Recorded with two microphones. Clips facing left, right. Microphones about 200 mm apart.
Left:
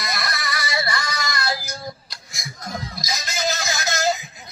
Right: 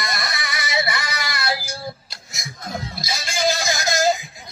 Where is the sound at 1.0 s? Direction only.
5° right (ahead or behind).